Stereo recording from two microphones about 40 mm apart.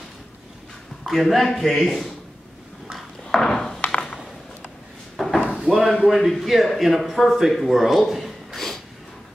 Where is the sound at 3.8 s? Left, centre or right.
Left.